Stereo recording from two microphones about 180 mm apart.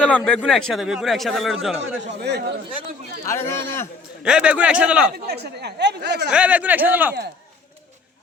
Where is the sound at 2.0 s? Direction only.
70° right (ahead or behind).